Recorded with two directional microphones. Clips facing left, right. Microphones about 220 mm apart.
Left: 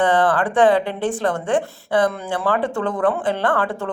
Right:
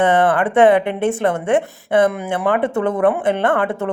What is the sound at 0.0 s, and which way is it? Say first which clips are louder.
Speech: right 2 dB; 25° right (ahead or behind).